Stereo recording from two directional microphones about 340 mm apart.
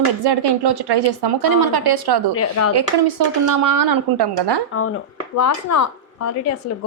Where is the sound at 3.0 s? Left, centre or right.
Right.